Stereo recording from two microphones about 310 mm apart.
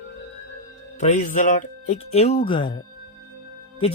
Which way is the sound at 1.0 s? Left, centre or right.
Left.